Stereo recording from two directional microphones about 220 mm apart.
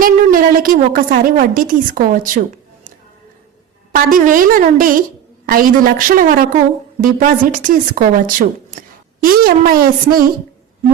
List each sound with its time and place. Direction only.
0.0 s a woman's voice: 40° right (ahead or behind)
3.9 s speech: 40° right (ahead or behind)